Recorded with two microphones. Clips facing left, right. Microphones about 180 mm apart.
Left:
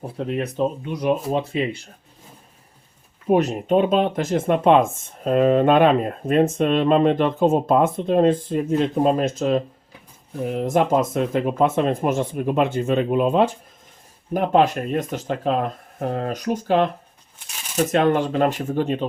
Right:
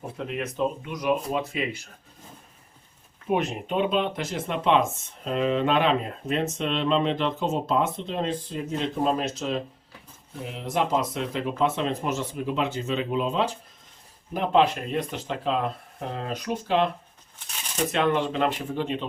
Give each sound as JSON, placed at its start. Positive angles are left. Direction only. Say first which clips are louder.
{"t": 0.2, "sound": "speech", "louder": "left 5 dB", "side_deg": 35}
{"t": 3.2, "sound": "speech", "louder": "left 8 dB", "side_deg": 40}
{"t": 17.9, "sound": "speech", "louder": "left 5 dB", "side_deg": 45}